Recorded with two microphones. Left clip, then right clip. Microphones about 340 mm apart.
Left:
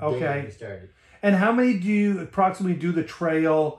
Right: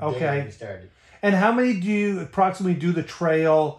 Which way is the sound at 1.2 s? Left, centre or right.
Right.